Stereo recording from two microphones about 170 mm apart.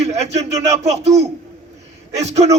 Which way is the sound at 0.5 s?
20° right (ahead or behind).